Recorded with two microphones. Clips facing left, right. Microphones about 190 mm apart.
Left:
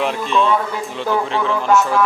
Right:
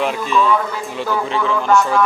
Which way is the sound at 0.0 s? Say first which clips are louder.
Even; 5° right (ahead or behind).